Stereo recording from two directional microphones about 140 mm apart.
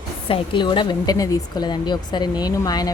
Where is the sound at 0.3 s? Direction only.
35° left (ahead or behind).